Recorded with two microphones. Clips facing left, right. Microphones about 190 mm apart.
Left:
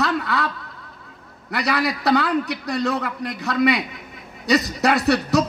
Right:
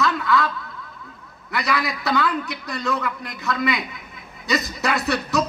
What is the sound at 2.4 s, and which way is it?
Speech, 80° left.